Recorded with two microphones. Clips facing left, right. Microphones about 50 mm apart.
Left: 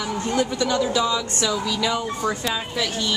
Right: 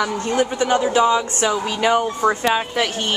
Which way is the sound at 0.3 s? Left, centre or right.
Right.